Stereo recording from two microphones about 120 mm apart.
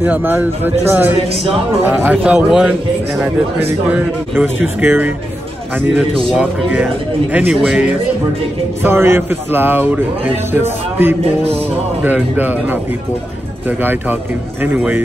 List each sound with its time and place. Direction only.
0.0 s speech: 15° right (ahead or behind)
3.9 s speech: 10° right (ahead or behind)
6.3 s speech: 10° right (ahead or behind)
8.8 s speech: 20° right (ahead or behind)